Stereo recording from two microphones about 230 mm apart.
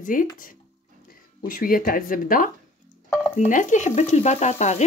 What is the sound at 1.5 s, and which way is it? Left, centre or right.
A woman's voice, left.